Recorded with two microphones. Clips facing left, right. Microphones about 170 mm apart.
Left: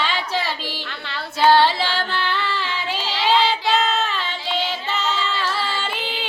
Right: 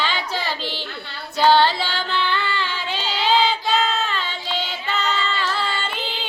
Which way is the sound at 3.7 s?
Centre (ahead or behind).